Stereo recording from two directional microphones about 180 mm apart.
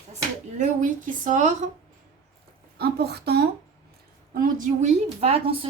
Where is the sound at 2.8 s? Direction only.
60° right (ahead or behind).